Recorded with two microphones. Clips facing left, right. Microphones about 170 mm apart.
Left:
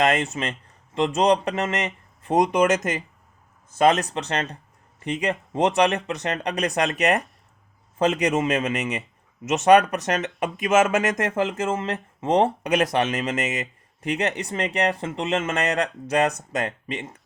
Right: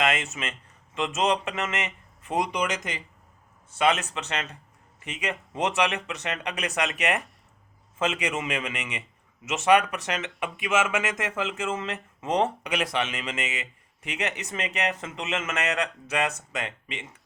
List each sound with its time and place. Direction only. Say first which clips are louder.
0.0 s a man's voice: left 5 dB; 35° left (ahead or behind)